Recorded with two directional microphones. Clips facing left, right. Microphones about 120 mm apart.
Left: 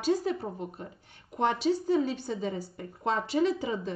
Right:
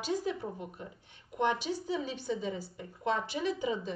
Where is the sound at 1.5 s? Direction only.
35° left (ahead or behind).